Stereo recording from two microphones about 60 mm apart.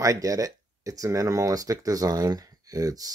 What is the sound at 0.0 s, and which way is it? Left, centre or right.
Speech, right.